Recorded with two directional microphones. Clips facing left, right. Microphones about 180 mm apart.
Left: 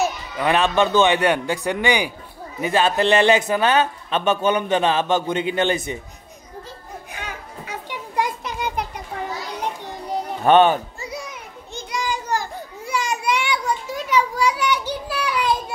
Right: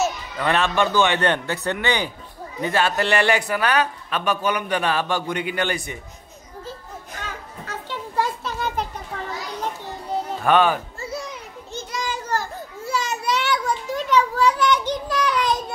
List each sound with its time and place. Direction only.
0.0 s a man's voice: 15° left (ahead or behind)
7.1 s children playing: 10° left (ahead or behind)
10.4 s speech: 25° left (ahead or behind)
11.9 s children playing: 15° left (ahead or behind)